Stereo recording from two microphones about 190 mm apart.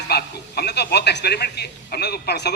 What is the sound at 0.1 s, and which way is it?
A man's voice, 55° left (ahead or behind).